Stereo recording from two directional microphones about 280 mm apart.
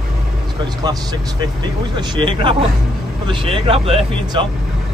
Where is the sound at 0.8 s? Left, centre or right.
Centre.